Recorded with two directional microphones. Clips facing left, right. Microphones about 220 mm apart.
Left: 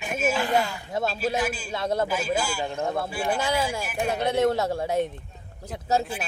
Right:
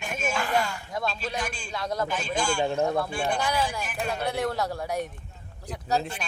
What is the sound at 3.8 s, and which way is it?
Speech, 10° left (ahead or behind).